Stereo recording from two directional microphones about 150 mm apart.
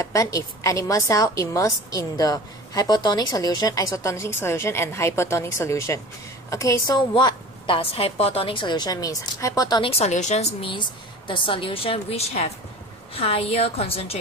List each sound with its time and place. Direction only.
0.0 s a woman's voice: 20° left (ahead or behind)
9.8 s a woman's voice: 45° left (ahead or behind)
11.2 s a woman's voice: 35° left (ahead or behind)